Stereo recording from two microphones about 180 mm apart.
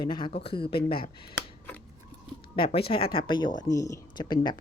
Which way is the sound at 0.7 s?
60° left (ahead or behind).